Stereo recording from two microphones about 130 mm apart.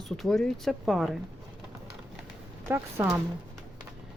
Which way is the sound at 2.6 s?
20° right (ahead or behind).